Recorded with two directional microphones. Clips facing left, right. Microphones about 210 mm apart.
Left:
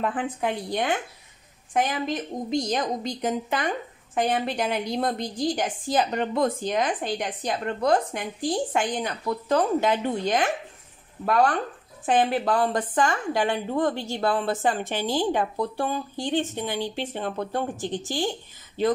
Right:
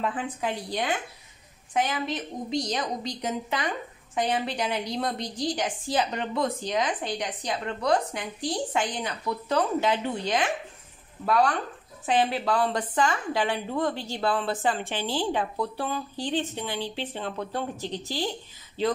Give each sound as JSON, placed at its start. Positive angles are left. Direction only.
{"t": 0.0, "sound": "a woman's voice", "side_deg": 50}
{"t": 1.7, "sound": "a woman's voice", "side_deg": 45}